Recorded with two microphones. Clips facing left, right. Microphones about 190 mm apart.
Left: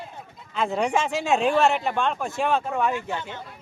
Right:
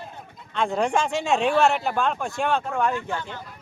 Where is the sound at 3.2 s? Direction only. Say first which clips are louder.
Even; 20° left (ahead or behind).